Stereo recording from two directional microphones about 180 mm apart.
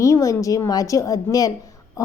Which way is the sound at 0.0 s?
20° left (ahead or behind).